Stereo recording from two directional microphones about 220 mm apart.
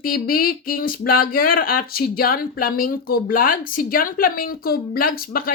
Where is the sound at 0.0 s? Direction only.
40° left (ahead or behind).